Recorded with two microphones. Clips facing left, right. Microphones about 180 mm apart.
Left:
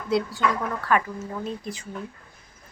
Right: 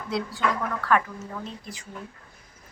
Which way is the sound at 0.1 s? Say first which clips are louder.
Left 6 dB; centre (ahead or behind).